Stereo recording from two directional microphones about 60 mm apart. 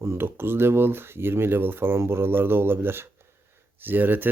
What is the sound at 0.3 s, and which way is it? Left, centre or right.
Speech, right.